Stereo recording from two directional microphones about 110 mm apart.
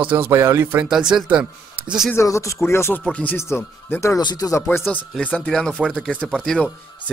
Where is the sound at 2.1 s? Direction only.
25° left (ahead or behind).